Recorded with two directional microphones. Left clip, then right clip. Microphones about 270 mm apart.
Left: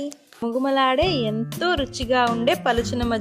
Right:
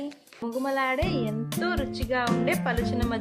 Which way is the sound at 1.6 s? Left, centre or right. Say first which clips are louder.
Left 7 dB; left.